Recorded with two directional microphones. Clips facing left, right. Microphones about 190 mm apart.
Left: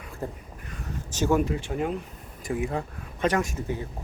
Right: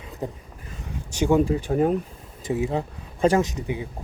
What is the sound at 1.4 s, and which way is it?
Speech, 35° right (ahead or behind).